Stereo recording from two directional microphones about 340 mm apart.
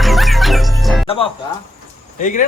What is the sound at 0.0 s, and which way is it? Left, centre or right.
Music, centre.